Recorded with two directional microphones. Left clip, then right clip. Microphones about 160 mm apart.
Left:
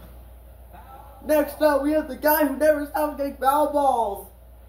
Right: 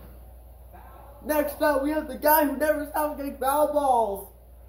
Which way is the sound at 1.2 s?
40° right (ahead or behind).